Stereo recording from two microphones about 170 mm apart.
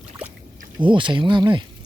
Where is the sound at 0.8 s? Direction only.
30° right (ahead or behind).